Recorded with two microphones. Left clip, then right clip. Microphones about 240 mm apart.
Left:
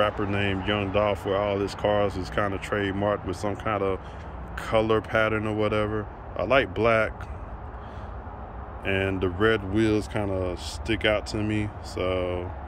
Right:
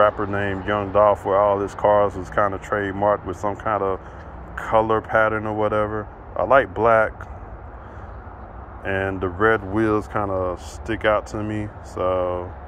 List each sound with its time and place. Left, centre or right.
0.0 s a man's voice: centre
8.8 s a man's voice: centre